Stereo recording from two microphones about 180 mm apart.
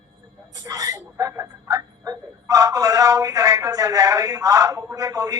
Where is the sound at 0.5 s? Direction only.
20° right (ahead or behind).